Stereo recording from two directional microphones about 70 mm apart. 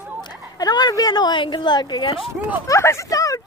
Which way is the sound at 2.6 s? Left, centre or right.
Left.